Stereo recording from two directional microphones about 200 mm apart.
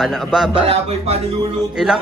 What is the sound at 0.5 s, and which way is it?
Speech, 30° right (ahead or behind).